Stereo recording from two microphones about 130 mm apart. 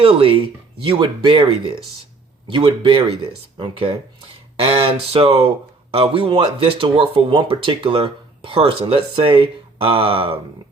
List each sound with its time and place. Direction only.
0.0 s speech: 45° right (ahead or behind)